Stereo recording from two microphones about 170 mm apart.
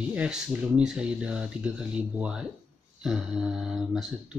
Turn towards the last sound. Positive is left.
turn(degrees=0)  # may be behind; listen again after turning